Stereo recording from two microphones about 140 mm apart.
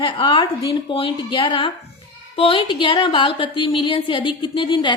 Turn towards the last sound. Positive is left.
turn(degrees=35)  # may be behind; listen again after turning